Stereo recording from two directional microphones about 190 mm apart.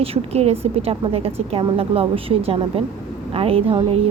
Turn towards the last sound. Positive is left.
turn(degrees=-30)  # may be behind; listen again after turning